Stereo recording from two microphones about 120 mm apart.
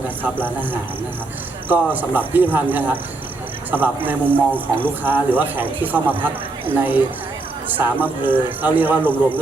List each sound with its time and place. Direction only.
1.6 s a man's voice: 15° right (ahead or behind)